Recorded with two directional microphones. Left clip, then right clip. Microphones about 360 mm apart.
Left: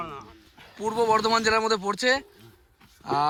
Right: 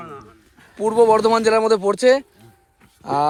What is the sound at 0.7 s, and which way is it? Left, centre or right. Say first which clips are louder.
Speech: right 8 dB; centre.